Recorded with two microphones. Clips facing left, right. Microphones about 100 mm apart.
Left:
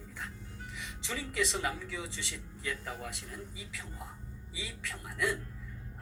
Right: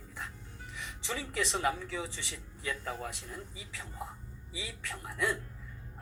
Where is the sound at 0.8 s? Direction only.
30° right (ahead or behind).